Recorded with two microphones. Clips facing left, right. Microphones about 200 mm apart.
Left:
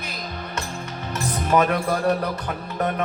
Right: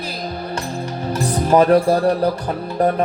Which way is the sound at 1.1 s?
30° right (ahead or behind).